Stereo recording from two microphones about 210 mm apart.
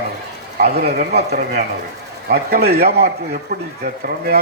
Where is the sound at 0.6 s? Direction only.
45° right (ahead or behind).